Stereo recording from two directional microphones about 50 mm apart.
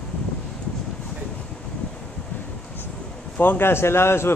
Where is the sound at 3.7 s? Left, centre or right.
Left.